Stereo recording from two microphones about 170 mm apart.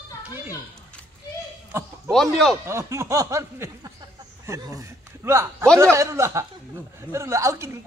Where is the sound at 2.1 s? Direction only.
Centre (ahead or behind).